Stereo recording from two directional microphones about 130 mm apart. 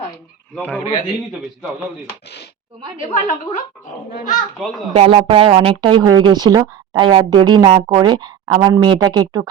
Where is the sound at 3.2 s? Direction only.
75° left (ahead or behind).